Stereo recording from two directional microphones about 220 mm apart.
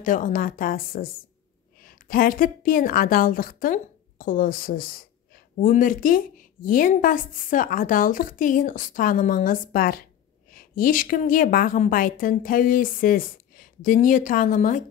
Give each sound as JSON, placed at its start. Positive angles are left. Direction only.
{"t": 0.0, "sound": "a woman's voice", "side_deg": 40}